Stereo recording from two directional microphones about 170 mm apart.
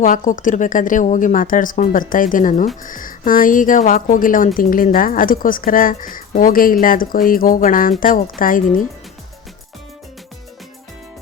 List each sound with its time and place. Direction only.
0.0 s speech: 50° left (ahead or behind)